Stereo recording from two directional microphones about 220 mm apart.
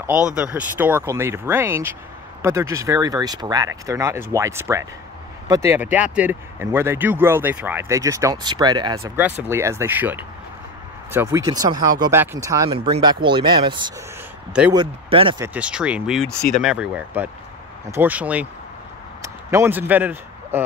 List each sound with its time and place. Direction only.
0.0 s speech: 5° right (ahead or behind); by 15.4 s 25° right (ahead or behind)
15.4 s speech: 5° right (ahead or behind)